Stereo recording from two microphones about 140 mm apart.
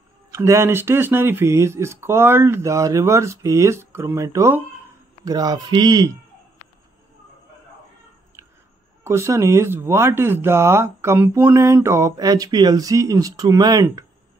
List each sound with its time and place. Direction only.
0.3 s speech: 20° right (ahead or behind)
9.0 s speech: 20° right (ahead or behind)